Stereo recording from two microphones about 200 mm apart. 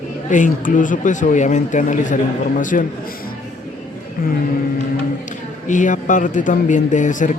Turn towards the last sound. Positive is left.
turn(degrees=40)  # may be behind; listen again after turning